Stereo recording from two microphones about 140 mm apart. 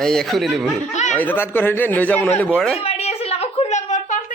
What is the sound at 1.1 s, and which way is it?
A man's voice, 10° left (ahead or behind).